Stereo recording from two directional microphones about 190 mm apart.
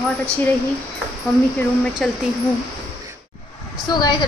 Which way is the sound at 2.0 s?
Centre (ahead or behind).